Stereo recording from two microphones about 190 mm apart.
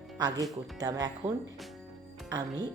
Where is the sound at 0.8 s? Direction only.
20° right (ahead or behind).